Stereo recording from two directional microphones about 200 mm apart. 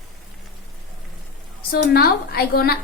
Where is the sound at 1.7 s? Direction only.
50° left (ahead or behind).